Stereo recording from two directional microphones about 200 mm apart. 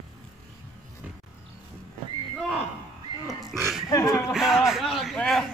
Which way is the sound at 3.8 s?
15° left (ahead or behind).